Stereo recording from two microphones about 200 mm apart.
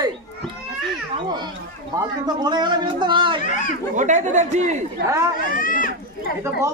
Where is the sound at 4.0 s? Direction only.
40° right (ahead or behind).